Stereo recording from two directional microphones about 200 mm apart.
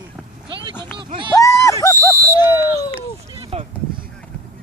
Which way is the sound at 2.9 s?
25° right (ahead or behind).